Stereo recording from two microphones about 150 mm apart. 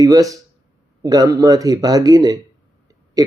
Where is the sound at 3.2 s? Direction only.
25° right (ahead or behind).